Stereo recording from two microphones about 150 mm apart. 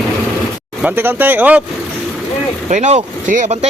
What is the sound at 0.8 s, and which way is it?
Speech, 10° right (ahead or behind).